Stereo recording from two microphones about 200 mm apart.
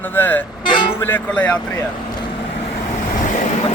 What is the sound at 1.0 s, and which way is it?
Speech, 10° left (ahead or behind).